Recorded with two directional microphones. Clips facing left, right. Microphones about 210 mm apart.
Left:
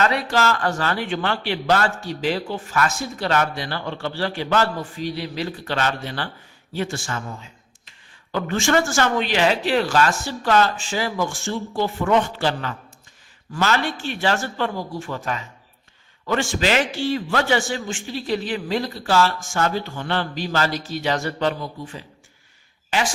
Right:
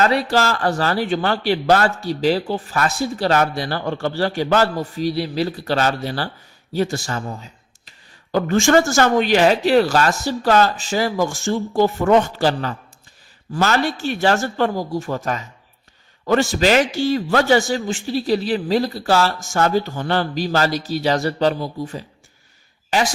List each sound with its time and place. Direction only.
0.0 s speech: 35° right (ahead or behind)